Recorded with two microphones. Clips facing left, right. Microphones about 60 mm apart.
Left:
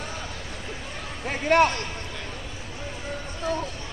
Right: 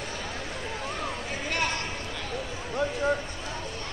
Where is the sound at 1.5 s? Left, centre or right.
Left.